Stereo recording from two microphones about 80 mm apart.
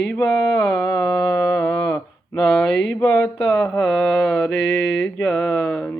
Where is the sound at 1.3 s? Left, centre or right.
Left.